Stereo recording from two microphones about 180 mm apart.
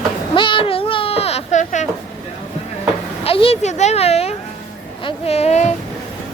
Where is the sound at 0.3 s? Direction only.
25° left (ahead or behind).